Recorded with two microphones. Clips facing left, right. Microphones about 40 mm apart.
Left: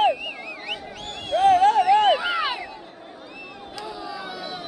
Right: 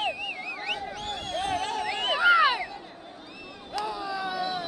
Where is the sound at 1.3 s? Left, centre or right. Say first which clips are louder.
Left 14 dB; centre.